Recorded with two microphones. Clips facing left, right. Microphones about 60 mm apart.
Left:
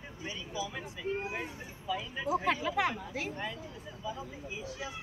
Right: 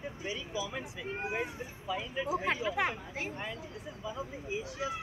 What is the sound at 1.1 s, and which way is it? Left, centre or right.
Speech, right.